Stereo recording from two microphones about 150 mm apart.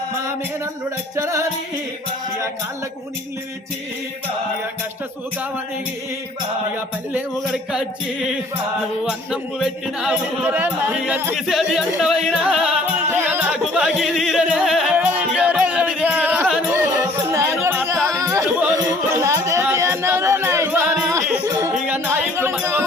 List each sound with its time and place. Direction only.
1.1 s music: 20° right (ahead or behind)
7.3 s music: centre (ahead or behind)
9.0 s speech: centre (ahead or behind)
11.3 s music: centre (ahead or behind)
13.1 s music: 15° right (ahead or behind)
13.5 s music: 5° right (ahead or behind)
17.9 s music: 5° left (ahead or behind)
18.2 s music: 20° right (ahead or behind)
22.5 s a sound: 15° right (ahead or behind)